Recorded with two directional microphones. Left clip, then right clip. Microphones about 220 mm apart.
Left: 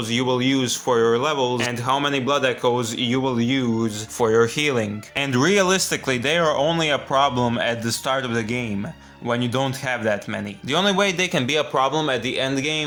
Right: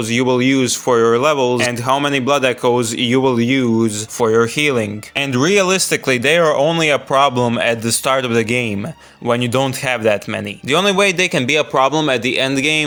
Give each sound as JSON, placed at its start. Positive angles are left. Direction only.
{"t": 0.1, "sound": "speech", "side_deg": -30}